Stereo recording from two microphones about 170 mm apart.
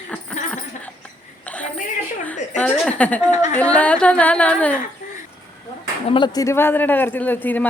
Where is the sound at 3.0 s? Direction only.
10° left (ahead or behind).